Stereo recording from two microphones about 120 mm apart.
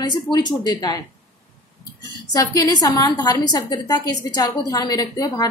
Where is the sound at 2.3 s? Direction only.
30° left (ahead or behind).